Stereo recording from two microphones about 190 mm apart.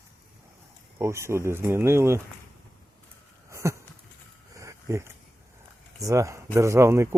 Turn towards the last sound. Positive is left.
turn(degrees=-15)  # may be behind; listen again after turning